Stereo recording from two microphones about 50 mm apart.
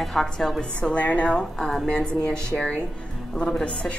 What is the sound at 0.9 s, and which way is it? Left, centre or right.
Speech, left.